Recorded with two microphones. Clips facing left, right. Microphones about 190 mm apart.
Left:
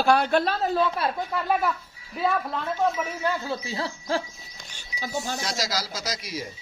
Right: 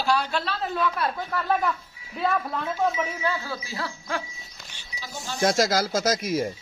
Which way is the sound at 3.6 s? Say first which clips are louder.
Left 3 dB; 25° left (ahead or behind).